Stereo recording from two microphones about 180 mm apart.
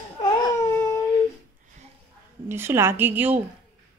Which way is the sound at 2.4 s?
15° right (ahead or behind).